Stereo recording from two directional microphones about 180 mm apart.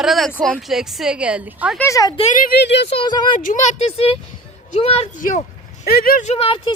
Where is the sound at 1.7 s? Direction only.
15° left (ahead or behind).